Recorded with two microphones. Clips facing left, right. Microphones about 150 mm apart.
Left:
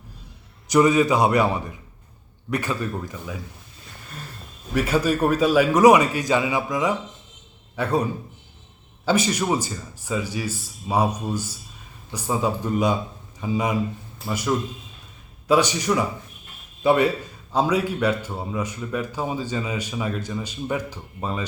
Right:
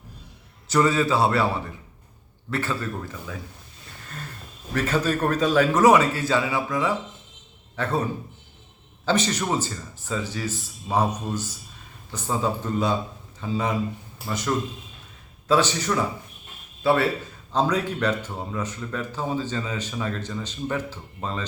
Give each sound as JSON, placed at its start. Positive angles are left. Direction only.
{"t": 0.7, "sound": "speech", "side_deg": 15}
{"t": 4.7, "sound": "speech", "side_deg": 10}
{"t": 9.0, "sound": "speech", "side_deg": 10}